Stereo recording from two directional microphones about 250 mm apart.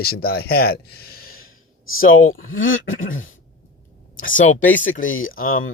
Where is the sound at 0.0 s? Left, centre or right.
Left.